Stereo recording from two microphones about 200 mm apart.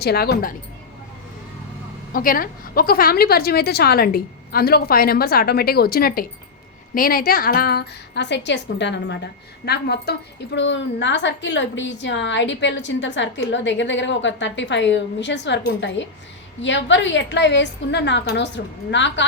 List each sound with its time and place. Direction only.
0.0 s a woman's voice: 55° left (ahead or behind)
2.1 s a woman's voice: 45° left (ahead or behind); by 19.2 s 65° left (ahead or behind)